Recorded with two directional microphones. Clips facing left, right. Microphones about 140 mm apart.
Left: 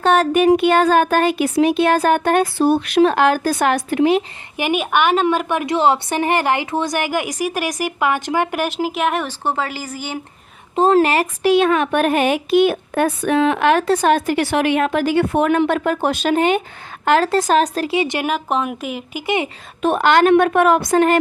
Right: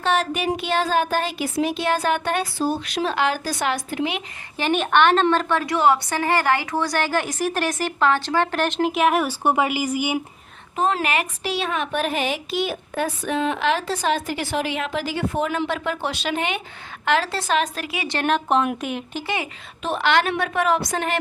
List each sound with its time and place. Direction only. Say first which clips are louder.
0.0 s a woman's voice: left 8 dB; 50° left (ahead or behind)
4.5 s a woman's voice: left 1 dB; 10° left (ahead or behind); by 10.2 s 10° right (ahead or behind)
10.8 s a woman's voice: left 8 dB; 35° left (ahead or behind)
11.4 s a woman's voice: left 11 dB; 55° left (ahead or behind); by 18.1 s 30° left (ahead or behind)
18.1 s speech: even; 5° left (ahead or behind)
19.2 s speech: left 9 dB; 20° left (ahead or behind)
19.8 s a woman's voice: left 7 dB; 50° left (ahead or behind)